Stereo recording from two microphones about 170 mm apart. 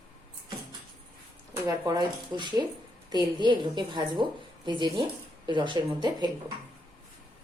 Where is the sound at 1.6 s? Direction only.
20° right (ahead or behind).